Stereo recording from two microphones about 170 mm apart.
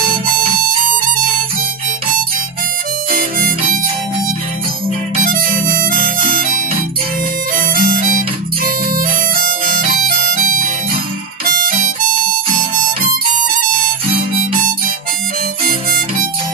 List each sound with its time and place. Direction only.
3.1 s harmonica: 55° right (ahead or behind)
5.1 s music: 55° right (ahead or behind)
11.5 s harmonica: 55° right (ahead or behind)